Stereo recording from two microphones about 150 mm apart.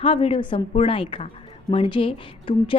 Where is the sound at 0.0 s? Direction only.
40° left (ahead or behind).